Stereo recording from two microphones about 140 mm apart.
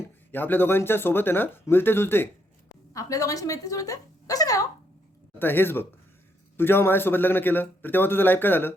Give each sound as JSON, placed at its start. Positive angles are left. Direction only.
{"t": 0.3, "sound": "a man's voice", "side_deg": 15}
{"t": 5.4, "sound": "a man's voice", "side_deg": 15}